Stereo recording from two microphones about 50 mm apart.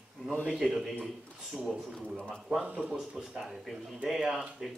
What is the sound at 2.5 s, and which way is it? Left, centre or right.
Speech, centre.